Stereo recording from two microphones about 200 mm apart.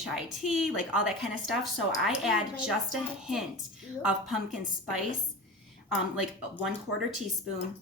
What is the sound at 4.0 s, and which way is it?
A woman's voice, centre (ahead or behind).